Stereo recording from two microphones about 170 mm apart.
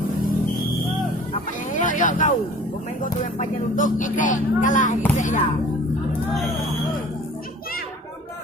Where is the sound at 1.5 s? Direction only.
50° left (ahead or behind).